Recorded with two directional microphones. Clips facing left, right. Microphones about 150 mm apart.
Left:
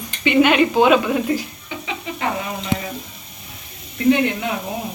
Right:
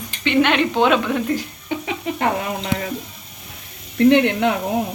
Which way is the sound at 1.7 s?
50° right (ahead or behind).